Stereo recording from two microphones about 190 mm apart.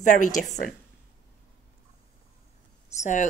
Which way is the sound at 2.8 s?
40° left (ahead or behind).